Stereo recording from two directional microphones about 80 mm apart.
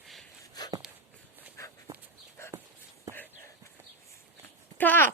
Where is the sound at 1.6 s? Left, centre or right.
Left.